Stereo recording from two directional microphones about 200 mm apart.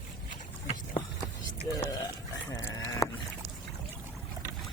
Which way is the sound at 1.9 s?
15° left (ahead or behind).